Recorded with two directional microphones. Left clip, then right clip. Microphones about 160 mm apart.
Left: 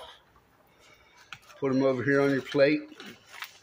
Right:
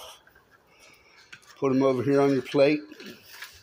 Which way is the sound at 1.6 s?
15° right (ahead or behind).